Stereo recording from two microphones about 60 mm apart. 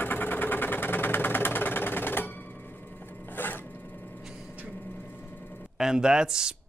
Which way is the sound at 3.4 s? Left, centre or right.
Left.